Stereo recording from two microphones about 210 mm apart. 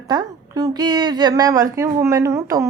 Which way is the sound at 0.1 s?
20° right (ahead or behind).